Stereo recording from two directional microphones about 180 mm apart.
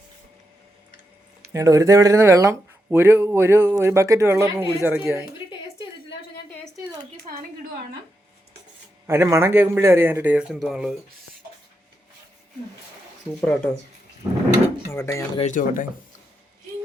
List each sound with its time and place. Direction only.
1.5 s speech: 20° right (ahead or behind)
9.0 s speech: 15° right (ahead or behind)
13.4 s speech: centre (ahead or behind)
14.8 s speech: 15° left (ahead or behind)
15.4 s speech: 45° left (ahead or behind)